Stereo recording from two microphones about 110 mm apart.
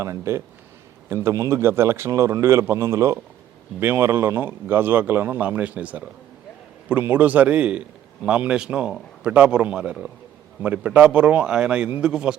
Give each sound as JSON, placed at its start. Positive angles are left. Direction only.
{"t": 0.0, "sound": "a man's voice", "side_deg": -25}